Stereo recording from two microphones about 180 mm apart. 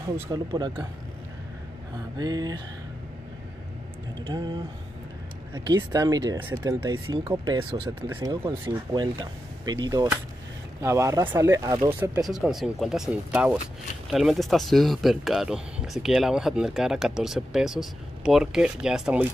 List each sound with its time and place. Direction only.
0.3 s speech: 25° right (ahead or behind)
2.1 s speech: 20° right (ahead or behind)
4.3 s speech: 25° right (ahead or behind)
8.4 s speech: 10° right (ahead or behind)
8.9 s speech: 25° right (ahead or behind)
12.3 s speech: centre (ahead or behind)